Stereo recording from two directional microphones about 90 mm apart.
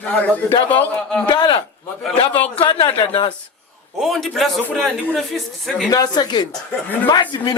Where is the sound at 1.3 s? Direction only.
60° left (ahead or behind).